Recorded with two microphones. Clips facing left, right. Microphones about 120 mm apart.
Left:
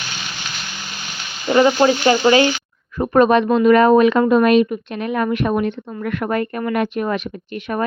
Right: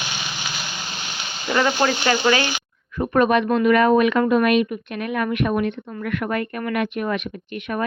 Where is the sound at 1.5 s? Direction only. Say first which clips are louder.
Left 6 dB; 25° left (ahead or behind).